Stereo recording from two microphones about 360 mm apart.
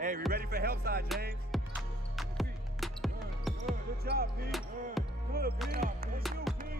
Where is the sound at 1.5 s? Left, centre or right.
Centre.